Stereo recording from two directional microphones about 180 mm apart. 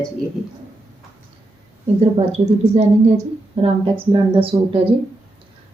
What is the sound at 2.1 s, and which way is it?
A woman's voice, 35° right (ahead or behind).